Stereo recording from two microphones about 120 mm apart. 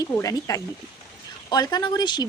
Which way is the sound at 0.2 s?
30° left (ahead or behind).